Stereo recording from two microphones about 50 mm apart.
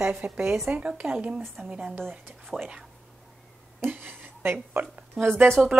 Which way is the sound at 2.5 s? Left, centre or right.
Centre.